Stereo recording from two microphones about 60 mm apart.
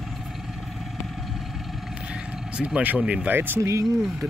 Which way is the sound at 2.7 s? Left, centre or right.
Right.